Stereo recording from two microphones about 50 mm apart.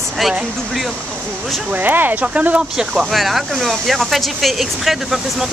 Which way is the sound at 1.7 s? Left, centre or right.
Right.